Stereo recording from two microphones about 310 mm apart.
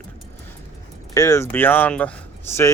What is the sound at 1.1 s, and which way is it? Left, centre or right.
Speech, centre.